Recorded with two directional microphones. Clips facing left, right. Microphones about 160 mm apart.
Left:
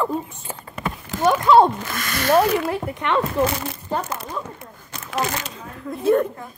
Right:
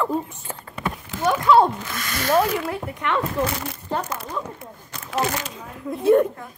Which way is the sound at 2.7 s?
25° left (ahead or behind).